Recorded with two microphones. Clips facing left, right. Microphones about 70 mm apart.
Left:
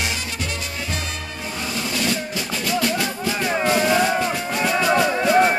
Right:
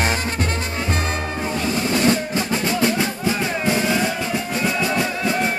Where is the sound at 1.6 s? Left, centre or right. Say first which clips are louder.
Right 6 dB; right.